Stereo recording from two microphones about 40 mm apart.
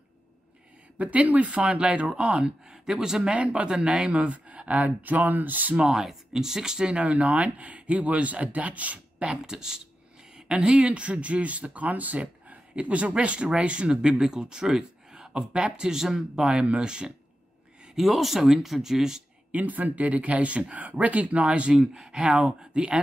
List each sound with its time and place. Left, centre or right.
0.9 s speech: right
1.6 s speech: right
2.7 s speech: centre
3.3 s speech: right
4.1 s speech: right
5.8 s speech: centre
6.9 s speech: right
9.2 s speech: right
17.9 s speech: centre
19.5 s speech: right